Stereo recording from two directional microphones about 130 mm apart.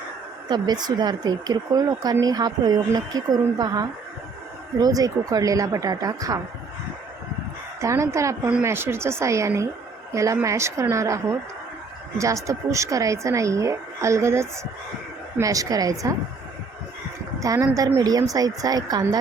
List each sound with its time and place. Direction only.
0.4 s speech: 35° right (ahead or behind)
7.8 s a woman's voice: 25° right (ahead or behind)
17.4 s speech: 25° right (ahead or behind)